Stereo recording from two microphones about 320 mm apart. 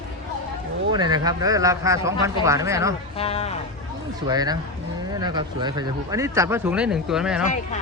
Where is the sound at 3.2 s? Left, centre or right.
Centre.